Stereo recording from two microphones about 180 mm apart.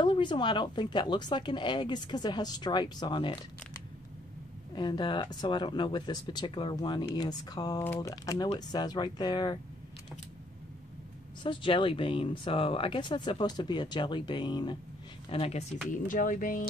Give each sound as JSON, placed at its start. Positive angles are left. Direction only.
{"t": 0.0, "sound": "speech", "side_deg": 25}
{"t": 4.7, "sound": "speech", "side_deg": 25}
{"t": 11.4, "sound": "speech", "side_deg": 30}
{"t": 15.9, "sound": "speech", "side_deg": 45}